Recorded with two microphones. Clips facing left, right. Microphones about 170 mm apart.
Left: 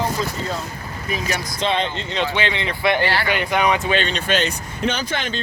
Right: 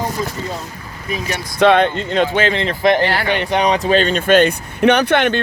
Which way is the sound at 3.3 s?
30° right (ahead or behind).